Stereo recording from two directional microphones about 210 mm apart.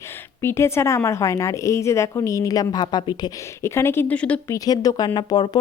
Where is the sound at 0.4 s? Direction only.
10° left (ahead or behind).